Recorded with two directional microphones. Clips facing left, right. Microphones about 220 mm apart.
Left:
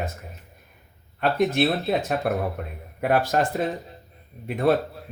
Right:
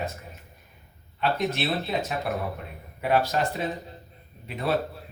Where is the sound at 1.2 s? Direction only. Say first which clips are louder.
Left 6 dB; 50° left (ahead or behind).